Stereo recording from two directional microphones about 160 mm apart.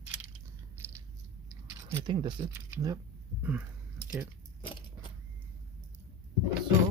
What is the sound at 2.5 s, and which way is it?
Speech, 15° right (ahead or behind).